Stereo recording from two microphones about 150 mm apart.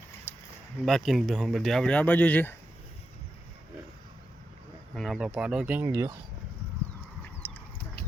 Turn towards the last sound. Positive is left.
turn(degrees=15)  # may be behind; listen again after turning